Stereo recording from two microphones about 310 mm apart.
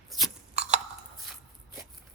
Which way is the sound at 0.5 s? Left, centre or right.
Right.